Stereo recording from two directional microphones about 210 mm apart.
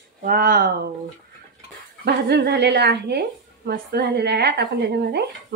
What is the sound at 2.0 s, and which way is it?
A woman's voice, 50° right (ahead or behind).